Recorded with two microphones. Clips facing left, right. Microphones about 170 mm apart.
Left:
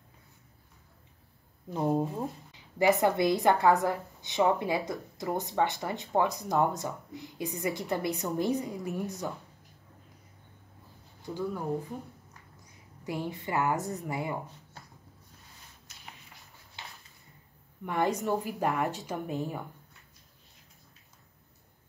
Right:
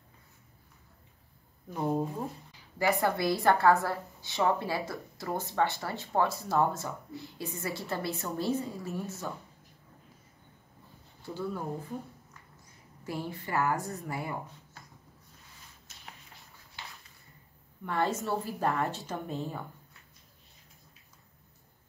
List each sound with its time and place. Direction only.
1.7 s a woman's voice: 15° left (ahead or behind)
11.2 s a woman's voice: 15° left (ahead or behind)
13.0 s a woman's voice: 20° left (ahead or behind)
14.8 s a sound: 30° left (ahead or behind)
17.8 s a woman's voice: 15° left (ahead or behind)